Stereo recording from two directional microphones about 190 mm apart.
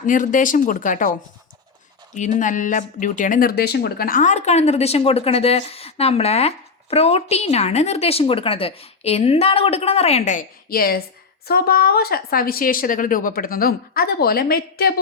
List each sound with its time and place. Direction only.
0.0 s a woman's voice: 45° left (ahead or behind)
2.4 s a woman's voice: 45° left (ahead or behind)